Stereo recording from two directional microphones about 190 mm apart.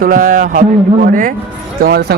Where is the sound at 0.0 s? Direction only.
45° right (ahead or behind).